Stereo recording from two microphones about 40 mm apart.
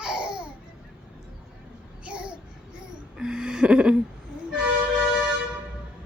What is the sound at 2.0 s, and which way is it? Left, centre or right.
Babbling, right.